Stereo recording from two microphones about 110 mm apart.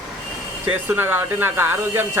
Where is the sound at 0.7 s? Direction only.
15° right (ahead or behind).